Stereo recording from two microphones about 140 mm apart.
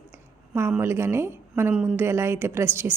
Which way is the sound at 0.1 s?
20° right (ahead or behind).